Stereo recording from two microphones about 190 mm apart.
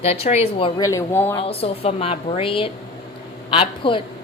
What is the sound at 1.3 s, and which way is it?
A woman's voice, 30° left (ahead or behind).